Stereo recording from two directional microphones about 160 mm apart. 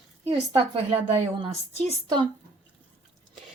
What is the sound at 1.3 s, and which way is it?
Speech, 30° right (ahead or behind).